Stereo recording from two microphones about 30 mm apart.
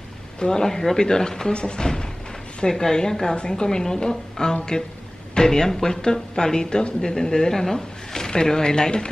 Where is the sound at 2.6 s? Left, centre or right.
Left.